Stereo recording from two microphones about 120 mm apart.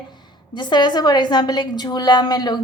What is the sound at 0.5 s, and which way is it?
A woman's voice, 40° left (ahead or behind).